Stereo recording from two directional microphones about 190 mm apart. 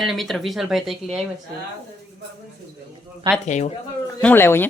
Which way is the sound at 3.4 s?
40° left (ahead or behind).